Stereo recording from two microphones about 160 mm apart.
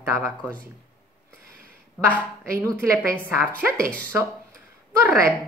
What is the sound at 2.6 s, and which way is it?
Speech, 15° right (ahead or behind).